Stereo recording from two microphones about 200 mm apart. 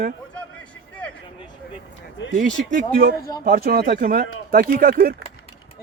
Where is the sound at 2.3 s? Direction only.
40° right (ahead or behind).